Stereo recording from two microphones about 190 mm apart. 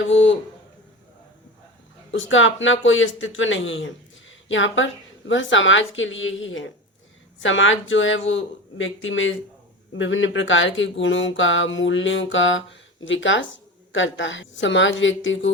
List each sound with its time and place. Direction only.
0.0 s speech: 80° left
2.1 s speech: 90° left